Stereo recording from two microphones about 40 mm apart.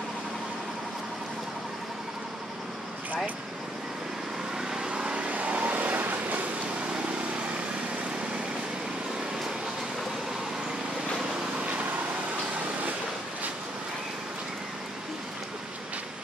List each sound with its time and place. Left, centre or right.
4.8 s vehicle: right
5.3 s vehicle: right
11.6 s vehicle: right